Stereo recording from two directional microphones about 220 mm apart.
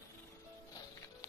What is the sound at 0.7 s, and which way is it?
Music, 15° left (ahead or behind).